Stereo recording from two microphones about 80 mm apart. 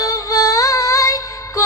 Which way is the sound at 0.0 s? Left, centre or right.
Left.